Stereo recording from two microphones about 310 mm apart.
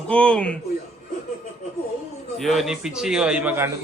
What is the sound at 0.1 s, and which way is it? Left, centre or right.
Speech, centre.